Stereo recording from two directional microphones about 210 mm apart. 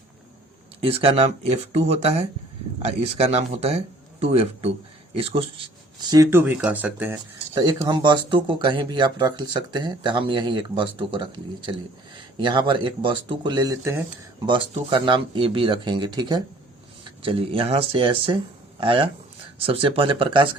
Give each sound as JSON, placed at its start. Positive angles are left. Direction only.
{"t": 0.8, "sound": "speech", "side_deg": -25}
{"t": 7.5, "sound": "speech", "side_deg": -25}